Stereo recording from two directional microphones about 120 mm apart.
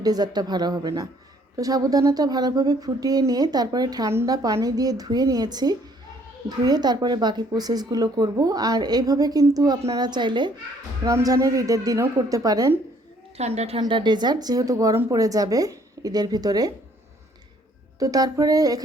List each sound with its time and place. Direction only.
0.0 s a woman's voice: 35° right (ahead or behind)
11.0 s a woman's voice: 30° right (ahead or behind)
13.3 s a woman's voice: 60° right (ahead or behind)
13.7 s a woman's voice: 40° right (ahead or behind)
18.0 s a woman's voice: 30° right (ahead or behind)